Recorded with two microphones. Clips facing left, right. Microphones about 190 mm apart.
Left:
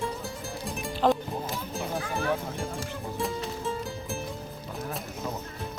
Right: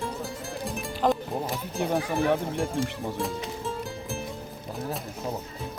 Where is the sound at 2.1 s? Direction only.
Centre (ahead or behind).